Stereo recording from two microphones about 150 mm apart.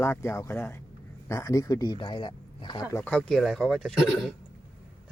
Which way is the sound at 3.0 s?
5° left (ahead or behind).